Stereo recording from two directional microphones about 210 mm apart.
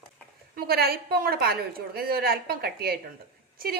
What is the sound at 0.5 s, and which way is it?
A woman's voice, 45° right (ahead or behind).